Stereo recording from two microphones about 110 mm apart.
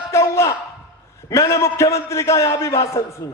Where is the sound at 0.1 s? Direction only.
25° left (ahead or behind).